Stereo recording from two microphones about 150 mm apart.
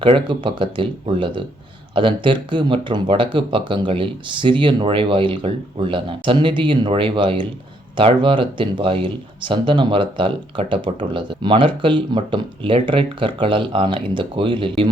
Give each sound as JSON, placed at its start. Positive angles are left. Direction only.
{"t": 0.0, "sound": "speech", "side_deg": -35}